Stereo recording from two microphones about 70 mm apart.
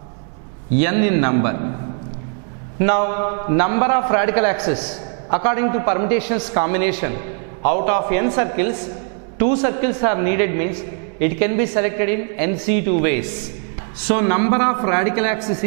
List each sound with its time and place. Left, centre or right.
0.7 s a man's voice: centre
2.8 s a man's voice: centre